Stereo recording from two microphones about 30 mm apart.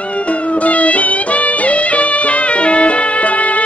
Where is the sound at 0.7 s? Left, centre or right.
Left.